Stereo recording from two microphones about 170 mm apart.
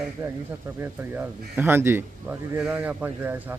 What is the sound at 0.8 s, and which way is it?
Speech, 10° right (ahead or behind).